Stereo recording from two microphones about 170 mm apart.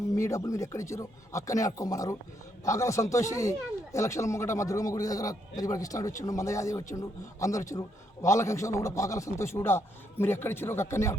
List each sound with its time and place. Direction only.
0.2 s a man's voice: 20° left (ahead or behind)